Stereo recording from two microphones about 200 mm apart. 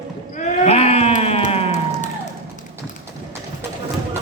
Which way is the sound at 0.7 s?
30° left (ahead or behind).